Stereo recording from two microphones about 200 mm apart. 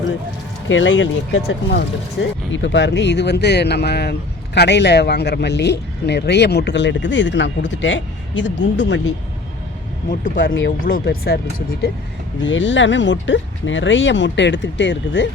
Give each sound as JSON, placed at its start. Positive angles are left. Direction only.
{"t": 0.7, "sound": "speech", "side_deg": 70}
{"t": 10.8, "sound": "speech", "side_deg": 50}
{"t": 12.4, "sound": "speech", "side_deg": 65}